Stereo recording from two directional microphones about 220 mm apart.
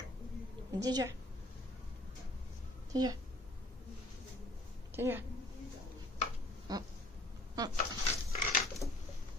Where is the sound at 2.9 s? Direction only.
15° right (ahead or behind).